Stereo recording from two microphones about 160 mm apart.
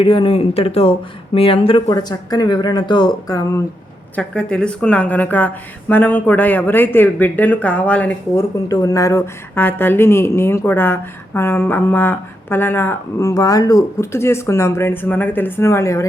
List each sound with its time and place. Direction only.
0.0 s speech: 35° left (ahead or behind)
1.9 s speech: 25° left (ahead or behind)
4.1 s speech: 5° left (ahead or behind)
8.5 s speech: 20° left (ahead or behind)